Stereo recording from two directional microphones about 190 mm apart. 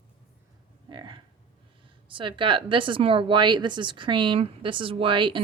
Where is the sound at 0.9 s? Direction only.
25° right (ahead or behind).